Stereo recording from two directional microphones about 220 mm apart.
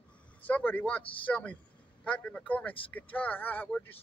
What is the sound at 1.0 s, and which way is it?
Speech, 25° left (ahead or behind).